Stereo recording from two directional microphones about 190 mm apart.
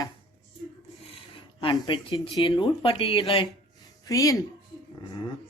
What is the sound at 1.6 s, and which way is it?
Speech, 25° left (ahead or behind).